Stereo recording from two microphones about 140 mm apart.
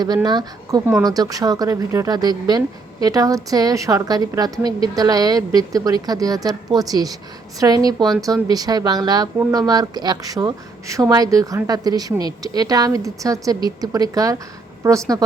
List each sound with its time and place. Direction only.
0.0 s speech: 30° right (ahead or behind)